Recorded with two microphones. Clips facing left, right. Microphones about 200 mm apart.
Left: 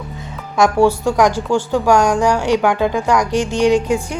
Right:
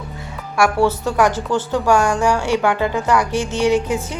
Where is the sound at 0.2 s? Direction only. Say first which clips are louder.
Left 2 dB; 20° left (ahead or behind).